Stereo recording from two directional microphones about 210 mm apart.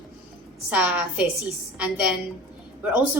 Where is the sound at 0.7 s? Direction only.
5° right (ahead or behind).